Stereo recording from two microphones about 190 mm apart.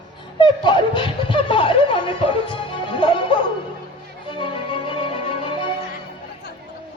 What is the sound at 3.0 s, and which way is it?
Music, 25° left (ahead or behind).